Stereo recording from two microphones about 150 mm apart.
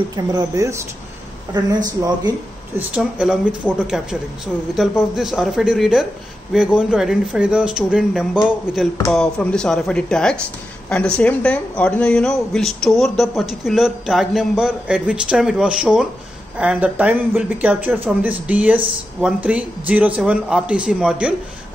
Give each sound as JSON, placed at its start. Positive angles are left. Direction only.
{"t": 0.1, "sound": "speech", "side_deg": -25}
{"t": 2.0, "sound": "speech", "side_deg": -25}
{"t": 2.9, "sound": "speech", "side_deg": -5}